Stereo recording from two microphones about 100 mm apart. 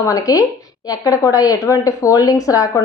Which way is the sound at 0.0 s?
35° left (ahead or behind).